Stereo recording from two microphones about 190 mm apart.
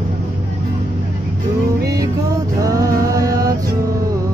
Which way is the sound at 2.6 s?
15° right (ahead or behind).